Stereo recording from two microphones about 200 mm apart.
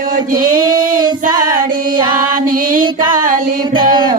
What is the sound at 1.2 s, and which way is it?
Child singing, 40° right (ahead or behind).